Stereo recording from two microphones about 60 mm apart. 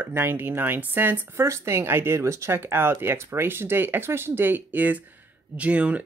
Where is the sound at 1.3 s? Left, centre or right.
Right.